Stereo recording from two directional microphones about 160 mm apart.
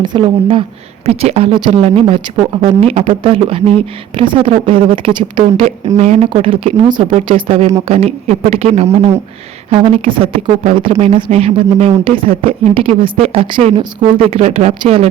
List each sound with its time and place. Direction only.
0.0 s speech: 30° right (ahead or behind)
6.0 s speech: 45° right (ahead or behind)